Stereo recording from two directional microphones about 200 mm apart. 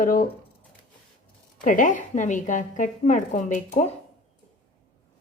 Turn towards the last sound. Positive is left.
turn(degrees=35)  # may be behind; listen again after turning